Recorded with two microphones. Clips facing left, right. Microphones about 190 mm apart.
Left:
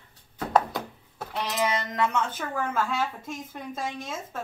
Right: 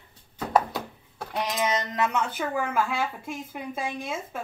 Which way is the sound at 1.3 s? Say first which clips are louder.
Right 1 dB; 15° right (ahead or behind).